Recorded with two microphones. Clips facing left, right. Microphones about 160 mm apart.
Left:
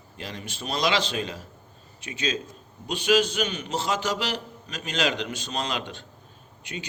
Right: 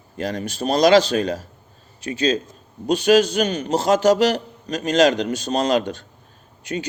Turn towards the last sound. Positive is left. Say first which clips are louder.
# right 10 dB
turn(degrees=-40)  # may be behind; listen again after turning